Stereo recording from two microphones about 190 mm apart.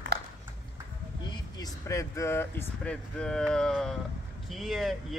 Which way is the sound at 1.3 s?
20° left (ahead or behind).